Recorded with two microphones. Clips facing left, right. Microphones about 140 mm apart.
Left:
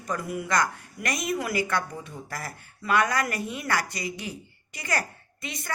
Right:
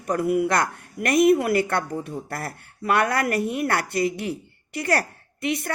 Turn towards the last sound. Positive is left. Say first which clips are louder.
# right 12 dB
turn(degrees=-65)  # may be behind; listen again after turning